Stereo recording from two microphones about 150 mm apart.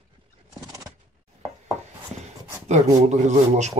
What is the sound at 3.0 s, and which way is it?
Speech, 50° right (ahead or behind).